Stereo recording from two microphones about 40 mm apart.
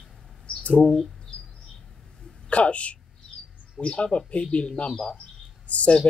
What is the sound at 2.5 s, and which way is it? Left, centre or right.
Speech, left.